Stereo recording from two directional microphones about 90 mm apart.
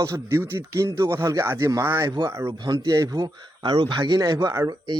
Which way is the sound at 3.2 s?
65° right (ahead or behind).